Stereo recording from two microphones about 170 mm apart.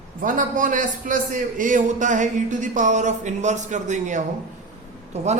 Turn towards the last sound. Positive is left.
turn(degrees=-40)  # may be behind; listen again after turning